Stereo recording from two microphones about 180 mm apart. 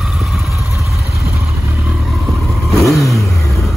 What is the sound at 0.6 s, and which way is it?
Vehicle, 15° right (ahead or behind).